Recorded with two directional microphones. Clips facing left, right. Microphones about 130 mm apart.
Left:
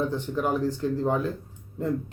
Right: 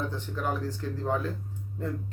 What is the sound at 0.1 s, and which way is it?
Speech, 15° left (ahead or behind).